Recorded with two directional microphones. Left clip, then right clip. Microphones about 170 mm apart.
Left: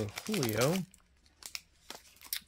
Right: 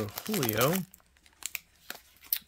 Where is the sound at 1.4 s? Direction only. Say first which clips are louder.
Right 5 dB; 55° right (ahead or behind).